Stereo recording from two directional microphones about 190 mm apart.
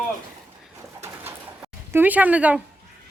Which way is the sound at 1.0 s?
10° right (ahead or behind).